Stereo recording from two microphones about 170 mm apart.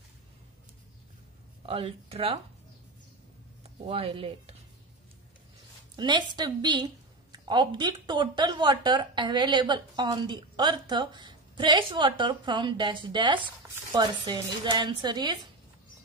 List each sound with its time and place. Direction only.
1.7 s speech: 35° right (ahead or behind)
3.6 s speech: 35° right (ahead or behind)
5.9 s a woman's voice: 25° right (ahead or behind)